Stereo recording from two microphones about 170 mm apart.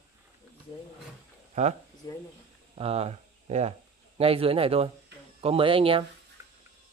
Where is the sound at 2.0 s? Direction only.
25° left (ahead or behind).